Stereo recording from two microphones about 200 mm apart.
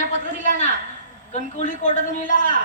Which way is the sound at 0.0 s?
40° left (ahead or behind).